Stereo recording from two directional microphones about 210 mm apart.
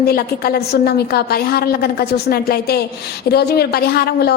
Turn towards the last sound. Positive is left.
turn(degrees=45)  # may be behind; listen again after turning